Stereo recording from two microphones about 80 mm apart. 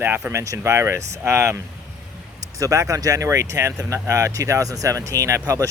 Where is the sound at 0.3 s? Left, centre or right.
Right.